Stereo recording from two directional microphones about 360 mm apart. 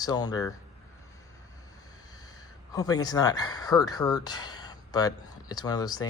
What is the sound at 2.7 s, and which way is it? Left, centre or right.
Speech, centre.